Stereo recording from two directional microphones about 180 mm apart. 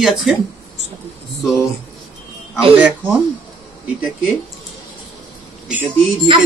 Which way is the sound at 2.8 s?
10° right (ahead or behind).